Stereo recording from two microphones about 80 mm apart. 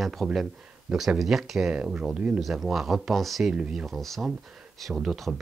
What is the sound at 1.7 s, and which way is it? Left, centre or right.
Speech, centre.